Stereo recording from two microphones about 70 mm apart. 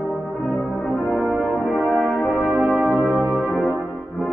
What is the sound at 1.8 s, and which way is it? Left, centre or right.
Brass instrument, right.